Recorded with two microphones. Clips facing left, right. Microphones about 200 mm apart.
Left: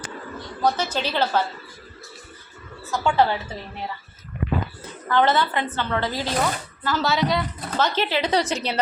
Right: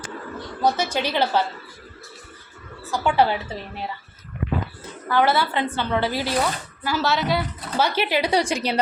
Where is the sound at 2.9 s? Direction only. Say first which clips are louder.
Even; 15° right (ahead or behind).